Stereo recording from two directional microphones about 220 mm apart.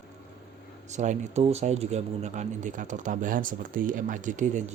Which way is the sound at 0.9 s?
35° right (ahead or behind).